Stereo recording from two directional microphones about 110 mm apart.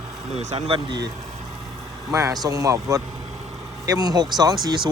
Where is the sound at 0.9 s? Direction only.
40° right (ahead or behind).